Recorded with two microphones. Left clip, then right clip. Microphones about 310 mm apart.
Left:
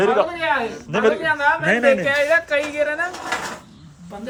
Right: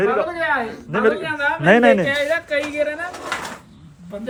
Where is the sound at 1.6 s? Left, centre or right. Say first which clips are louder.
Right 8 dB; centre.